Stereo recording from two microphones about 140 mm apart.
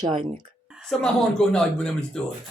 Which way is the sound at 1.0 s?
5° left (ahead or behind).